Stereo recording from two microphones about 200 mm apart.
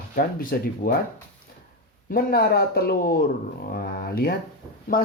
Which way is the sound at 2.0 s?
50° left (ahead or behind).